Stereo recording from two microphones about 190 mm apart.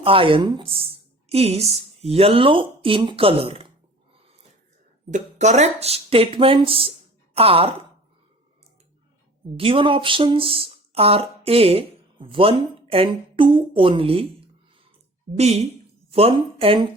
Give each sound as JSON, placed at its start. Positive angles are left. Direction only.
{"t": 0.0, "sound": "a woman's voice", "side_deg": -30}
{"t": 5.1, "sound": "speech", "side_deg": -40}
{"t": 9.6, "sound": "speech", "side_deg": -30}